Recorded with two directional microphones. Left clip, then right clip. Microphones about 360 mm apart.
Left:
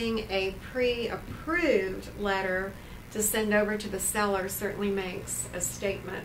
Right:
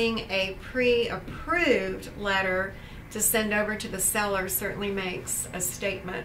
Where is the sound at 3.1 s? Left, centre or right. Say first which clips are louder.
Even; centre.